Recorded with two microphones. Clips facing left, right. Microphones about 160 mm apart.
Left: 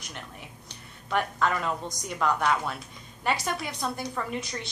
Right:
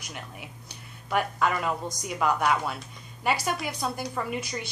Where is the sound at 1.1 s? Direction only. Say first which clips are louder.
Right 1 dB; 5° right (ahead or behind).